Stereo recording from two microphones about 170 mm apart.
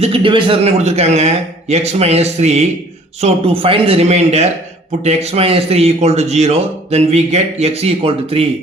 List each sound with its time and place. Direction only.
0.0 s a man's voice: 30° right (ahead or behind)